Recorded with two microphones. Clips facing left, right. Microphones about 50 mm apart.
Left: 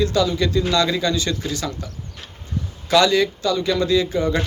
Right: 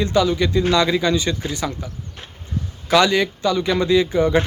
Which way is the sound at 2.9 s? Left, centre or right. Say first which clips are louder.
Even; right.